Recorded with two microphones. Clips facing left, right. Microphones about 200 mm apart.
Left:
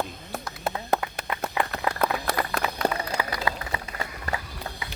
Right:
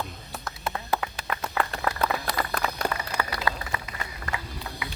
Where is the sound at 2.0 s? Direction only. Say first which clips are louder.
Left 4 dB; 50° left (ahead or behind).